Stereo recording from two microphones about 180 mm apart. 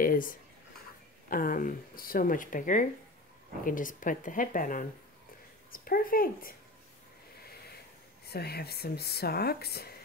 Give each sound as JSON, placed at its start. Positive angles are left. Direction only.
{"t": 0.0, "sound": "a sound", "side_deg": 50}
{"t": 1.3, "sound": "speech", "side_deg": 50}
{"t": 8.3, "sound": "speech", "side_deg": 60}